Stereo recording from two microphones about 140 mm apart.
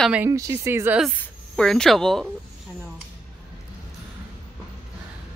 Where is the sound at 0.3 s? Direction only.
25° right (ahead or behind).